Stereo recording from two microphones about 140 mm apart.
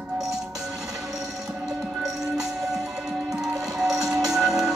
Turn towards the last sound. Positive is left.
turn(degrees=-5)  # may be behind; listen again after turning